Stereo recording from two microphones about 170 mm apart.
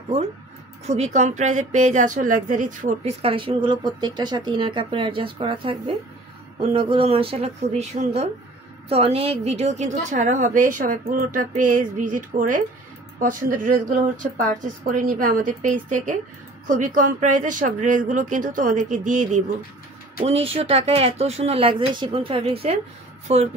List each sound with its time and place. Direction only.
0.8 s a woman's voice: 40° right (ahead or behind)
20.2 s speech: 35° right (ahead or behind)